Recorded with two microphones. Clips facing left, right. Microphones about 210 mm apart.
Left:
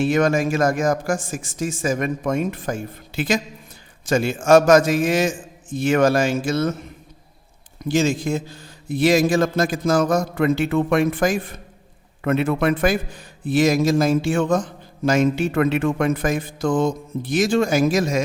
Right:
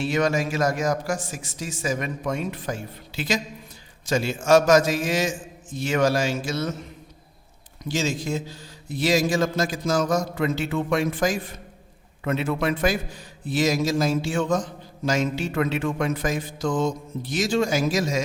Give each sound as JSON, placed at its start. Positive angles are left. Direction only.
{"t": 0.0, "sound": "a man's voice", "side_deg": 50}
{"t": 7.9, "sound": "a man's voice", "side_deg": 55}